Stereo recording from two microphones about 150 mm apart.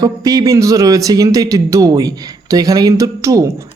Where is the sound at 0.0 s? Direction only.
25° right (ahead or behind).